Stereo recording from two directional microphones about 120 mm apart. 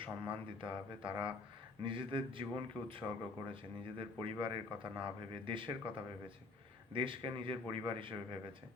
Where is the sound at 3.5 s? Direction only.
45° right (ahead or behind).